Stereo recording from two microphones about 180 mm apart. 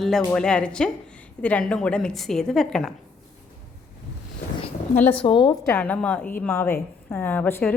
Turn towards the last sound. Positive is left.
turn(degrees=10)  # may be behind; listen again after turning